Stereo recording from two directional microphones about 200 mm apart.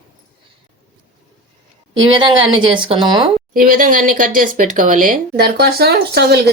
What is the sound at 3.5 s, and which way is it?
Speech, 45° right (ahead or behind).